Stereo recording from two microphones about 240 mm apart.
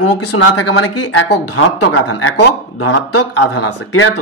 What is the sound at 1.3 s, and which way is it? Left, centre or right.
Speech, left.